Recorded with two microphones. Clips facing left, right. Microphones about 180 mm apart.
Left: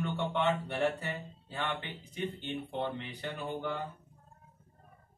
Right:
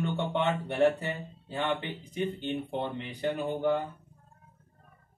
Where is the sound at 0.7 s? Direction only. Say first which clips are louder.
Right 6 dB; 20° right (ahead or behind).